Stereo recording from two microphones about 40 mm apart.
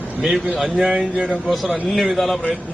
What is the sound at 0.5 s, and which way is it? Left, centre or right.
A man's voice, centre.